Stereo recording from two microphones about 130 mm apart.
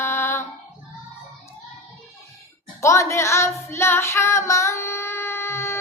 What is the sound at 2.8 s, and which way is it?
Child singing, 25° left (ahead or behind).